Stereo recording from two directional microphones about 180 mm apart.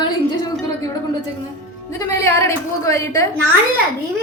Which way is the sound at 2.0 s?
15° left (ahead or behind).